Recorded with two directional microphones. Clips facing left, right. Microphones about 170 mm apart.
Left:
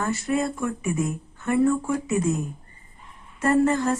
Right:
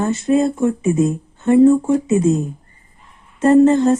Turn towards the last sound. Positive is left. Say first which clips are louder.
# right 9 dB
turn(degrees=-20)  # may be behind; listen again after turning